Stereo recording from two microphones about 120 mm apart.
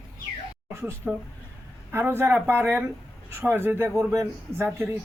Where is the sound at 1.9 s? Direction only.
20° right (ahead or behind).